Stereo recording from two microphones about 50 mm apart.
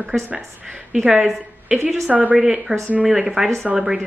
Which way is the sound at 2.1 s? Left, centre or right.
Right.